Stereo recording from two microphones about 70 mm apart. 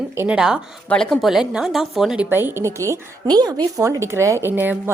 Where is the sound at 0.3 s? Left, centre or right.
Centre.